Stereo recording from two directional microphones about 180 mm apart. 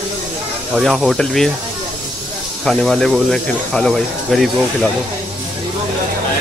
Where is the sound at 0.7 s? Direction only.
Centre (ahead or behind).